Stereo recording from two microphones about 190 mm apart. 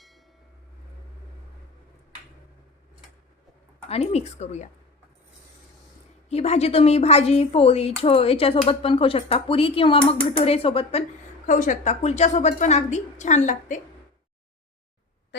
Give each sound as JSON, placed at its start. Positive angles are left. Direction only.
{"t": 3.8, "sound": "speech", "side_deg": 35}
{"t": 6.2, "sound": "speech", "side_deg": 35}
{"t": 11.4, "sound": "speech", "side_deg": 40}